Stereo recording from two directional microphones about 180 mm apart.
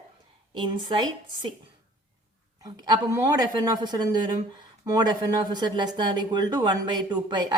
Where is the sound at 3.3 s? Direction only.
20° right (ahead or behind).